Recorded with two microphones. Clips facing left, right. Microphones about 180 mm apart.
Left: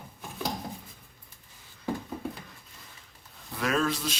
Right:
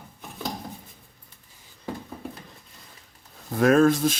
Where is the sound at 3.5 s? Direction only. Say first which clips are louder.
Right 10 dB; 45° right (ahead or behind).